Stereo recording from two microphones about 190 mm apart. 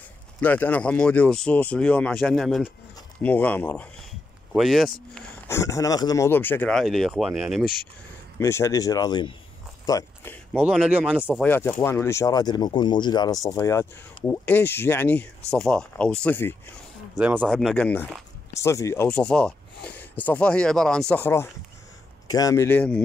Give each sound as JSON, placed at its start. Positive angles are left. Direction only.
{"t": 0.4, "sound": "speech", "side_deg": 10}
{"t": 5.5, "sound": "speech", "side_deg": 15}
{"t": 8.4, "sound": "speech", "side_deg": 15}
{"t": 9.8, "sound": "a sound", "side_deg": 15}
{"t": 10.6, "sound": "speech", "side_deg": -5}
{"t": 11.4, "sound": "speech", "side_deg": 10}
{"t": 17.2, "sound": "speech", "side_deg": -10}